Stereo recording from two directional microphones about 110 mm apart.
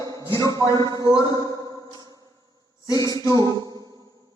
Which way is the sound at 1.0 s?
35° left (ahead or behind).